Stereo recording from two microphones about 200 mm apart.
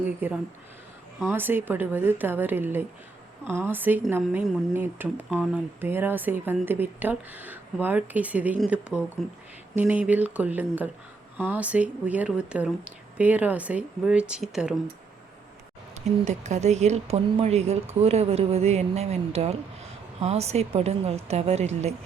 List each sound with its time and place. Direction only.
0.2 s speech: 10° right (ahead or behind)
16.2 s speech: 35° right (ahead or behind)